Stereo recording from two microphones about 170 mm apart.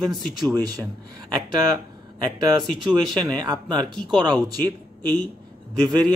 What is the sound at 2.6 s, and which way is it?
Speech, centre (ahead or behind).